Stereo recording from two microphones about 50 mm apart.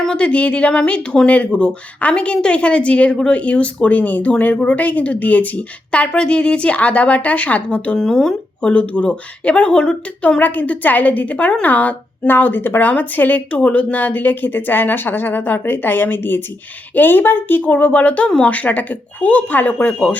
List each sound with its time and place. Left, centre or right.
0.2 s speech: left
7.9 s speech: centre
10.4 s speech: left